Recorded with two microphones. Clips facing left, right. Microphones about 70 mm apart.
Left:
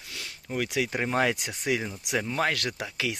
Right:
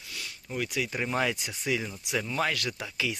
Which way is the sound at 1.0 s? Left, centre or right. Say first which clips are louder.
Left 3 dB; left.